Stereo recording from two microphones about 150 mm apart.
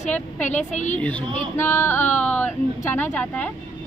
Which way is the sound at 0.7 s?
55° left (ahead or behind).